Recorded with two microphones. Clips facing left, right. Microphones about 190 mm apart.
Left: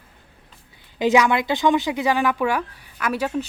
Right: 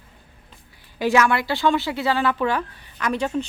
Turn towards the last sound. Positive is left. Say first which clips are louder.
# even
turn(degrees=5)  # may be behind; listen again after turning